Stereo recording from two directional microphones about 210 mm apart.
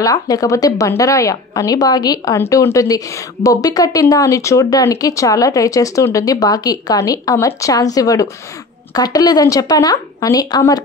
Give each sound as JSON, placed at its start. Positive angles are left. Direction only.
{"t": 0.0, "sound": "a woman's voice", "side_deg": 15}